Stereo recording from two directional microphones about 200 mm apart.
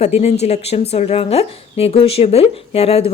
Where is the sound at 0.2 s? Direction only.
30° left (ahead or behind).